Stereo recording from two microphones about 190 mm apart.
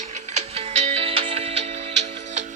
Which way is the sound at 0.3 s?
35° right (ahead or behind).